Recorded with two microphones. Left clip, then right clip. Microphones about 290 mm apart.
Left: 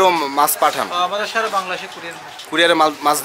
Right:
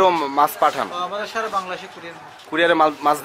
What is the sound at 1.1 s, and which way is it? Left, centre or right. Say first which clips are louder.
Speech: left 5 dB; centre.